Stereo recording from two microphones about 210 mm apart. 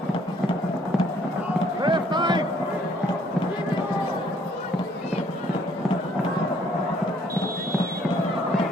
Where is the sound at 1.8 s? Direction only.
20° right (ahead or behind).